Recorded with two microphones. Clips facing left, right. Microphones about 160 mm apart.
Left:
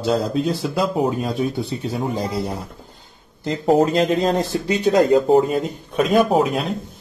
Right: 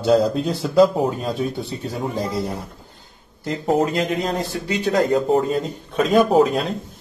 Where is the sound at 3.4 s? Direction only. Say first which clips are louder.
Left 3 dB; 25° left (ahead or behind).